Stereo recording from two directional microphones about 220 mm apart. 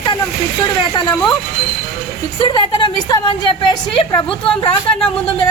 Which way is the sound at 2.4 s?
20° left (ahead or behind).